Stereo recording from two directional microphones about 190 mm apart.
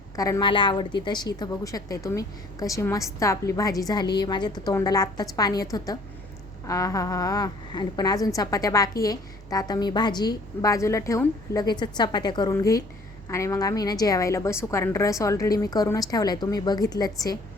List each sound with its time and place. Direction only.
0.2 s a woman's voice: 20° left (ahead or behind)